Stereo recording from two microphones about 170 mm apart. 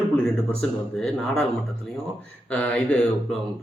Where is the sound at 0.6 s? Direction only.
5° left (ahead or behind).